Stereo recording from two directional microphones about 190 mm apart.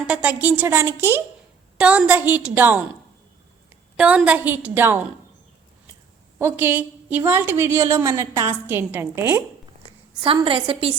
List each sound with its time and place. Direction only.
0.0 s a woman's voice: 5° right (ahead or behind)
3.9 s a woman's voice: 5° right (ahead or behind)
6.4 s a woman's voice: 10° right (ahead or behind)
10.2 s a woman's voice: 25° right (ahead or behind)